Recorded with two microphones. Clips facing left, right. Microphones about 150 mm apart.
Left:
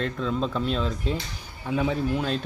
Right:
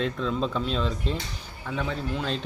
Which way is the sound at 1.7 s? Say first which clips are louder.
Left 5 dB; 15° left (ahead or behind).